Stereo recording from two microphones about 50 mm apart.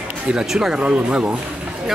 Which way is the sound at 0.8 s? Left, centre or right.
Right.